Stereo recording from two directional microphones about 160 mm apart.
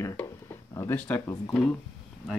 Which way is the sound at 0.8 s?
10° left (ahead or behind).